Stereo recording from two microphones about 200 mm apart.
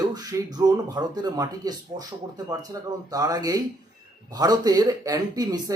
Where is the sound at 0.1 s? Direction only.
20° right (ahead or behind).